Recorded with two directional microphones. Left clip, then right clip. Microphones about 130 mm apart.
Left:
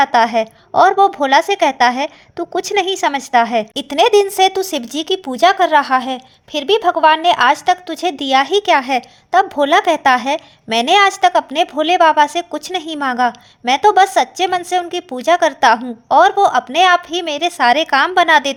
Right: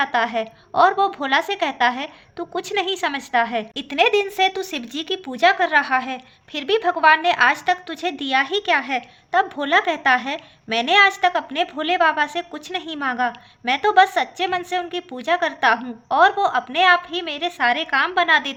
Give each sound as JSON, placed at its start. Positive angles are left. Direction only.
{"t": 0.0, "sound": "a woman's voice", "side_deg": 45}